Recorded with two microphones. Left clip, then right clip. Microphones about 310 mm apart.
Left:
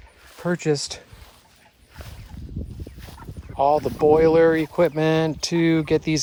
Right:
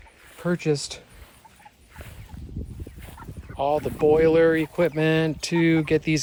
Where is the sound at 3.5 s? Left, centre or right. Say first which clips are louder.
Left 5 dB; centre.